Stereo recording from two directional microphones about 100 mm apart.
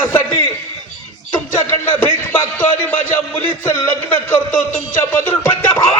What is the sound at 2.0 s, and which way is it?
A man's voice, 20° left (ahead or behind).